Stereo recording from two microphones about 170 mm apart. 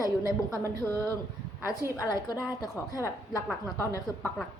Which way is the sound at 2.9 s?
20° left (ahead or behind).